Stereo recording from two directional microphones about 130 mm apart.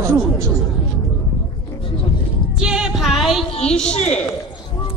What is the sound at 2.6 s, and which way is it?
Music, 5° right (ahead or behind).